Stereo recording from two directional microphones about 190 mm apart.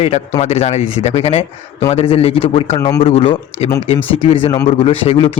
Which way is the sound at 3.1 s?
30° left (ahead or behind).